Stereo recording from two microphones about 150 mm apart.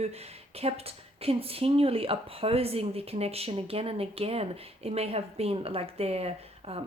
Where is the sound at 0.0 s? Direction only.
45° right (ahead or behind).